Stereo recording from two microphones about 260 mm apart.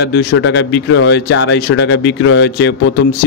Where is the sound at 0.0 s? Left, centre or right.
Left.